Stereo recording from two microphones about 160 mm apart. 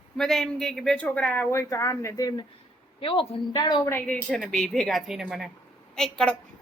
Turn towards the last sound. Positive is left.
turn(degrees=5)  # may be behind; listen again after turning